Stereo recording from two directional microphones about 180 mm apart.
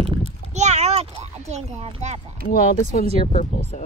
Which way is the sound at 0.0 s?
35° right (ahead or behind).